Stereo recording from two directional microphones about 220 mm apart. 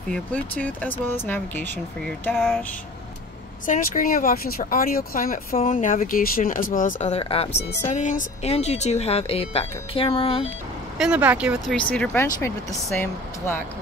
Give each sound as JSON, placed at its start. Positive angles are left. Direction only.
{"t": 0.1, "sound": "speech", "side_deg": 5}
{"t": 2.3, "sound": "speech", "side_deg": 0}
{"t": 3.6, "sound": "speech", "side_deg": 35}
{"t": 11.0, "sound": "speech", "side_deg": -5}
{"t": 11.7, "sound": "speech", "side_deg": 5}